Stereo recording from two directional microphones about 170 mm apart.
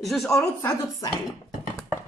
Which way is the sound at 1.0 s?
20° left (ahead or behind).